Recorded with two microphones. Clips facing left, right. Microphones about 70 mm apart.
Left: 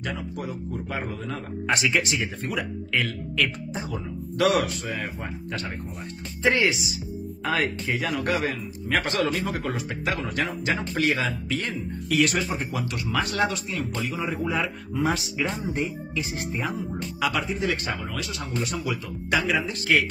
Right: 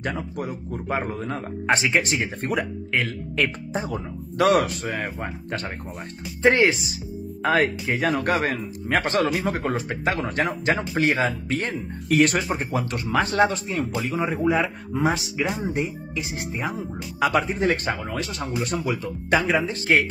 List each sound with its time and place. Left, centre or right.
0.0 s speech: right
1.7 s speech: right
2.9 s speech: right
3.7 s speech: right
17.2 s speech: right